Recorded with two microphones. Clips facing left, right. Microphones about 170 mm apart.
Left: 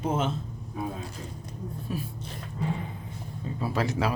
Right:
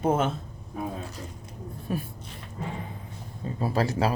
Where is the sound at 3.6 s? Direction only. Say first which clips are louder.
Right 2 dB; 35° right (ahead or behind).